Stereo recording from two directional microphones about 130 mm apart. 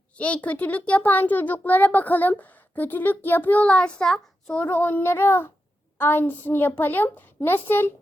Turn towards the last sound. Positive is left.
turn(degrees=15)  # may be behind; listen again after turning